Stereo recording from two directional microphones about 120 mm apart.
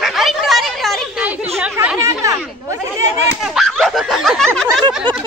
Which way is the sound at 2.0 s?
30° right (ahead or behind).